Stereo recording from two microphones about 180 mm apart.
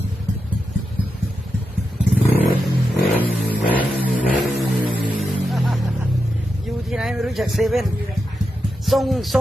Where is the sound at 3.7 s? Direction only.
10° left (ahead or behind).